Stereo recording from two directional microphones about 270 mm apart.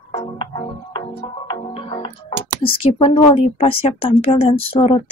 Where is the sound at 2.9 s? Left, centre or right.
Left.